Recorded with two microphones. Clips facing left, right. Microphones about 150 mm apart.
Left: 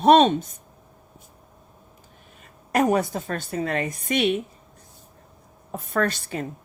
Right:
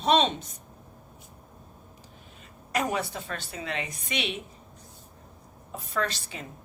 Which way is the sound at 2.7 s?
50° left (ahead or behind).